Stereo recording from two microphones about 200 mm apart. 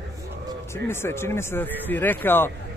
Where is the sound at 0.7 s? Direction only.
10° left (ahead or behind).